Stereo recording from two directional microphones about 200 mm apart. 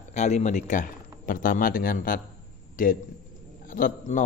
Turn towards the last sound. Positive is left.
turn(degrees=45)  # may be behind; listen again after turning